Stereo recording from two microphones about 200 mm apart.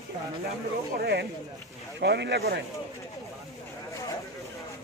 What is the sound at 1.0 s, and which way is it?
Speech, 55° right (ahead or behind).